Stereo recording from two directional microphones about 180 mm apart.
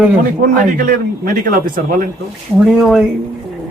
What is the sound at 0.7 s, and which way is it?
Speech, 55° right (ahead or behind).